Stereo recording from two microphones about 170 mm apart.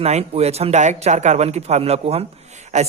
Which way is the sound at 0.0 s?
40° right (ahead or behind).